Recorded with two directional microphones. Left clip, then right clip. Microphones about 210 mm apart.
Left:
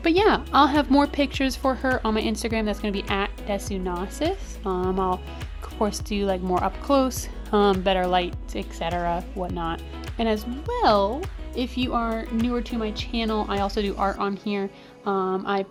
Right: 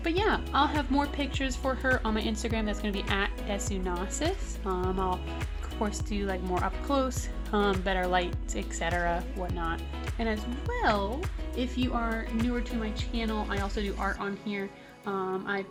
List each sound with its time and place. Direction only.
0.0 s speech: 40° left (ahead or behind)
12.5 s speech: 45° left (ahead or behind)